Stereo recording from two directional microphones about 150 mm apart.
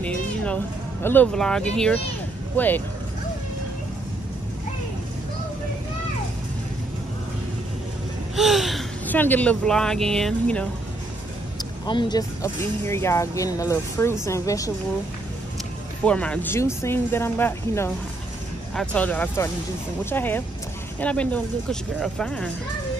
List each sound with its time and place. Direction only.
0.0 s a sound: 10° left (ahead or behind)
1.0 s speech: 10° left (ahead or behind)
8.4 s gasp: centre (ahead or behind)
9.0 s speech: 10° left (ahead or behind)
11.8 s speech: 30° left (ahead or behind)
16.0 s speech: 5° left (ahead or behind)